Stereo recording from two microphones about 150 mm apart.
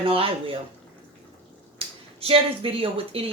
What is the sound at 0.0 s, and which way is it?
Speech, 35° right (ahead or behind).